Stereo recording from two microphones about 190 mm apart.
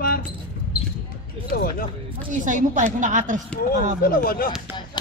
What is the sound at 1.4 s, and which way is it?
Speech, 50° left (ahead or behind).